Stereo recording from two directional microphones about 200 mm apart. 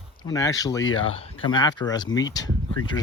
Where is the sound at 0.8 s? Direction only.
85° left.